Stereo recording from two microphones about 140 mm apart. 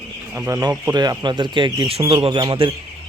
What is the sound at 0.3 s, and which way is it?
Speech, 15° right (ahead or behind).